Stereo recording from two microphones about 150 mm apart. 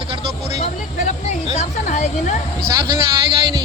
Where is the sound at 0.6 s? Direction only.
50° left (ahead or behind).